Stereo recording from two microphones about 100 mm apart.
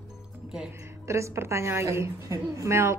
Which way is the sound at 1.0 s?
30° right (ahead or behind).